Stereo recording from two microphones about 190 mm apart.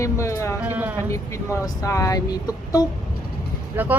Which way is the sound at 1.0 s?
15° left (ahead or behind).